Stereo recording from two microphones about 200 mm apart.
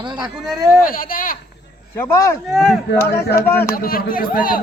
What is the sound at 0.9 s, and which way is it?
Speech, 45° left (ahead or behind).